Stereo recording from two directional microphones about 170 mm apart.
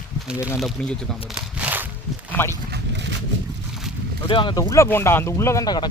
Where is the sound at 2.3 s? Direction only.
15° left (ahead or behind).